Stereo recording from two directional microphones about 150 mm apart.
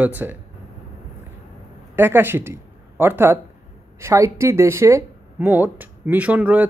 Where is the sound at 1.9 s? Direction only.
15° right (ahead or behind).